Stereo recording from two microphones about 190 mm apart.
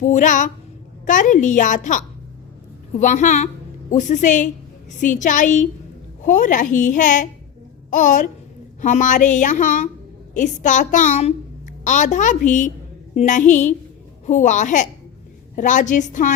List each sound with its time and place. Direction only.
0.0 s a woman's voice: 40° left (ahead or behind)